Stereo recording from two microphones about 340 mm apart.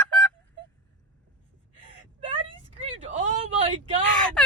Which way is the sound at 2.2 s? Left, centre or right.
Centre.